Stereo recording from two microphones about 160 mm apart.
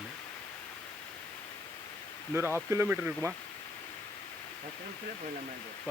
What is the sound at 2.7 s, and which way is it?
Speech, 10° right (ahead or behind).